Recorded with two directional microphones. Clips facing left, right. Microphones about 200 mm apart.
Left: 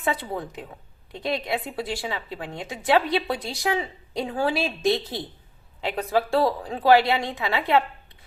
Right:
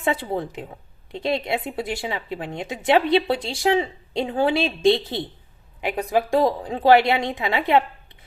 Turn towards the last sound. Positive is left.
turn(degrees=-20)  # may be behind; listen again after turning